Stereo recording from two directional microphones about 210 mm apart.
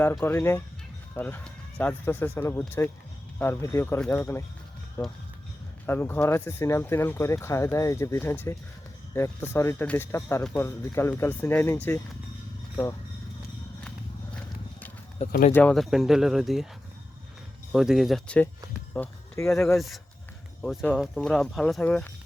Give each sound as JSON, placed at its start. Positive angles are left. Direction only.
{"t": 0.0, "sound": "speech", "side_deg": 10}
{"t": 15.3, "sound": "speech", "side_deg": 40}
{"t": 15.5, "sound": "speech", "side_deg": 5}
{"t": 17.7, "sound": "speech", "side_deg": 0}
{"t": 18.9, "sound": "speech", "side_deg": 15}
{"t": 20.6, "sound": "speech", "side_deg": 0}